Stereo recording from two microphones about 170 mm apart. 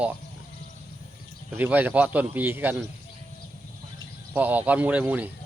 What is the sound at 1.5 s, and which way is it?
Speech, 10° right (ahead or behind).